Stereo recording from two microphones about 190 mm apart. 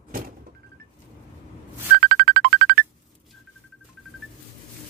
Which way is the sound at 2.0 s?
65° right (ahead or behind).